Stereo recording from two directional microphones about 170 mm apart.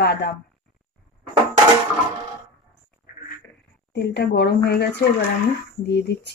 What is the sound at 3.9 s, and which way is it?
Speech, 80° left.